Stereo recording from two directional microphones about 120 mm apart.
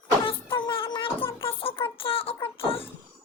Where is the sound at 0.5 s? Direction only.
45° left (ahead or behind).